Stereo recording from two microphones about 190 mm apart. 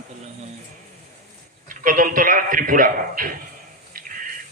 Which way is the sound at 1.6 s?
45° right (ahead or behind).